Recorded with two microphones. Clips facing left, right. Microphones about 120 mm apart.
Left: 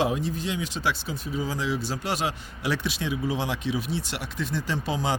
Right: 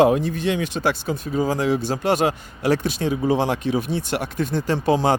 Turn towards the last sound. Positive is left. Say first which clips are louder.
# right 9 dB
turn(degrees=-50)  # may be behind; listen again after turning